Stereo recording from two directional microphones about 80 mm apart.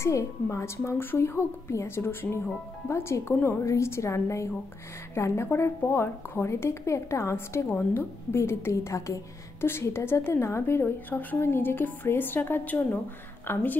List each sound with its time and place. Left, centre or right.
0.0 s a woman's voice: left